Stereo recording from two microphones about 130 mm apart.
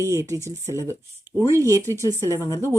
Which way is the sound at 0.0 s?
20° right (ahead or behind).